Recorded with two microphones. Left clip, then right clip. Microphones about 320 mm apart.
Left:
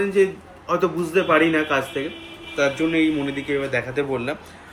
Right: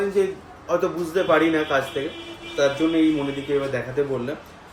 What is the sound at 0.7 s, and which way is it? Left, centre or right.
A man's voice, left.